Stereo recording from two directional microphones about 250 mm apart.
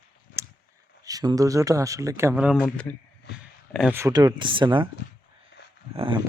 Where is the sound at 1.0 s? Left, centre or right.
Centre.